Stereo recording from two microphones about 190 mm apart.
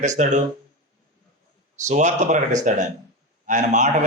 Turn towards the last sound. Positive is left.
turn(degrees=-40)  # may be behind; listen again after turning